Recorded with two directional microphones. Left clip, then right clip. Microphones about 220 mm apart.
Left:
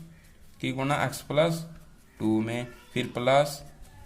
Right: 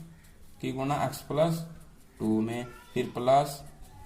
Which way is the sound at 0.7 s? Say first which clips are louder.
Left 2 dB; 50° left (ahead or behind).